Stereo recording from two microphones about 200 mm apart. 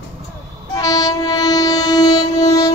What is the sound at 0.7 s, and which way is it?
Train, 15° left (ahead or behind).